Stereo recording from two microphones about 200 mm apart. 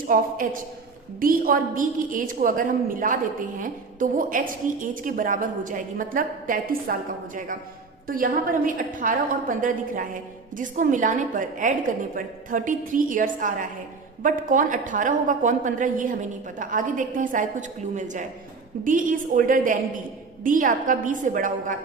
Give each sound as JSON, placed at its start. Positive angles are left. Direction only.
{"t": 0.1, "sound": "a woman's voice", "side_deg": -45}
{"t": 8.0, "sound": "a woman's voice", "side_deg": -45}